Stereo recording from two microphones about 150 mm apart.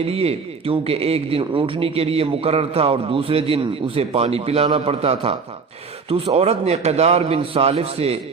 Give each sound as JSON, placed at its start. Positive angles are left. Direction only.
{"t": 0.0, "sound": "a man's voice", "side_deg": -40}